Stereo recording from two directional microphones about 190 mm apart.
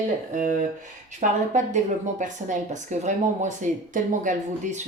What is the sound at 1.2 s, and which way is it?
A woman's voice, 40° right (ahead or behind).